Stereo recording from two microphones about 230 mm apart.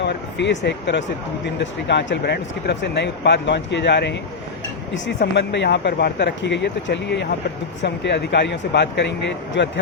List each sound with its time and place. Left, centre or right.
0.0 s speech: left